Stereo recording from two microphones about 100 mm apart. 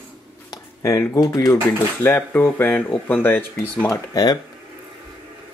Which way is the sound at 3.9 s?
40° left (ahead or behind).